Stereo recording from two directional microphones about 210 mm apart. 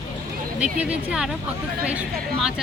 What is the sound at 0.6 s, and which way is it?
Speech, 5° right (ahead or behind).